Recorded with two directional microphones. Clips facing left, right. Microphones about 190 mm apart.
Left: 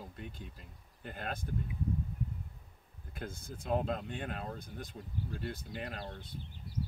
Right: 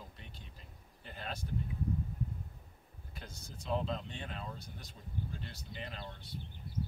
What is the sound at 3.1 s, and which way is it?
Speech, 55° left (ahead or behind).